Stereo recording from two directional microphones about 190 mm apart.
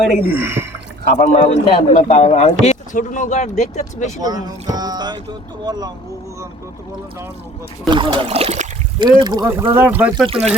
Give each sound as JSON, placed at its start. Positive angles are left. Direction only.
{"t": 0.1, "sound": "speech", "side_deg": -10}
{"t": 1.1, "sound": "a man's voice", "side_deg": 40}
{"t": 4.2, "sound": "speech", "side_deg": -20}
{"t": 7.9, "sound": "speech", "side_deg": -25}
{"t": 9.0, "sound": "speech", "side_deg": -20}
{"t": 10.2, "sound": "speech", "side_deg": -30}